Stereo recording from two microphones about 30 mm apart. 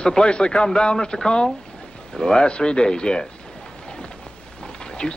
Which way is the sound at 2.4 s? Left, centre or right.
Left.